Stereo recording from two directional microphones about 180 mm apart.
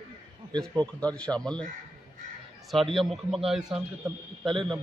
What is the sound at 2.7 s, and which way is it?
Speech, centre (ahead or behind).